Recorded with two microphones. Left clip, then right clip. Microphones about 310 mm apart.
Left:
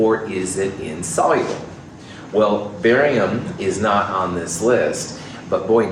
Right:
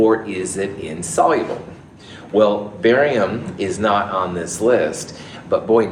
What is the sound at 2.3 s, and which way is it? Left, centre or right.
Speech, right.